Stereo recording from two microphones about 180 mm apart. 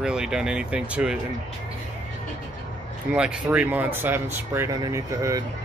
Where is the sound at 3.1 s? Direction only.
5° right (ahead or behind).